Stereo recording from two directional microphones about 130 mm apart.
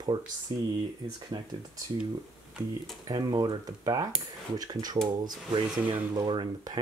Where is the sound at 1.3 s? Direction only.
35° right (ahead or behind).